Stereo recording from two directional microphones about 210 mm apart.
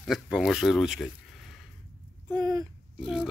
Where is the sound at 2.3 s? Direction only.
15° right (ahead or behind).